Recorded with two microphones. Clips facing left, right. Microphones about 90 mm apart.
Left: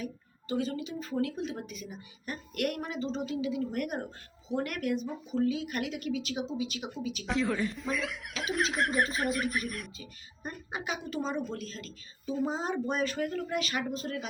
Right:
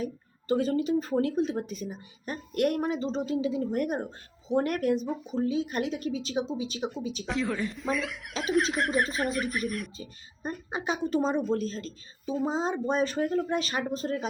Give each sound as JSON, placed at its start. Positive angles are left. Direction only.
{"t": 0.0, "sound": "speech", "side_deg": -40}
{"t": 7.3, "sound": "speech", "side_deg": 0}
{"t": 10.0, "sound": "speech", "side_deg": -30}
{"t": 12.2, "sound": "speech", "side_deg": -20}
{"t": 13.0, "sound": "speech", "side_deg": -30}